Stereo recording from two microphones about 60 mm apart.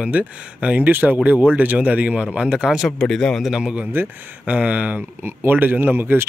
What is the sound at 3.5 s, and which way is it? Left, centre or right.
Speech, centre.